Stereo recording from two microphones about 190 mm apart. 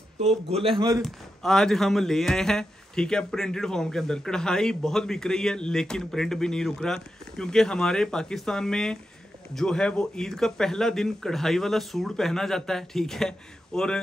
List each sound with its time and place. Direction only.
0.5 s speech: 30° right (ahead or behind)
1.0 s a man's voice: centre (ahead or behind)